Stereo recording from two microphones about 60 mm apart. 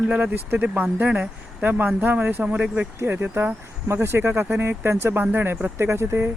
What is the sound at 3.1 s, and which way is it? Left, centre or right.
Speech, right.